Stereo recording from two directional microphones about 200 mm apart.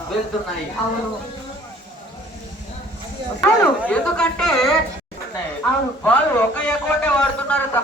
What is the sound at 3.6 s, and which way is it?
Speech, 5° left (ahead or behind).